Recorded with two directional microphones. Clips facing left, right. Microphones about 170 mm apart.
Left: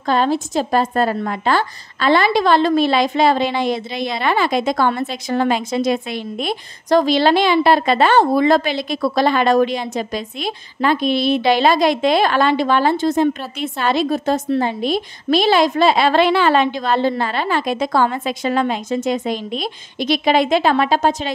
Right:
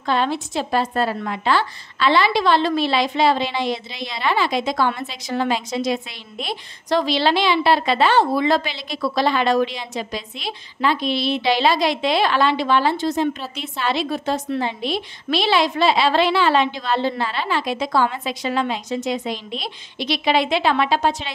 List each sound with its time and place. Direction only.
0.0 s a woman's voice: 40° left (ahead or behind)